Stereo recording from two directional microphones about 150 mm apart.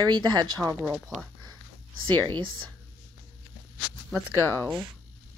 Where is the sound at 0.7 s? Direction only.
10° right (ahead or behind).